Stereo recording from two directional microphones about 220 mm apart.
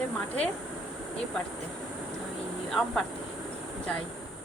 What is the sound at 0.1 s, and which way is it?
Speech, 5° left (ahead or behind).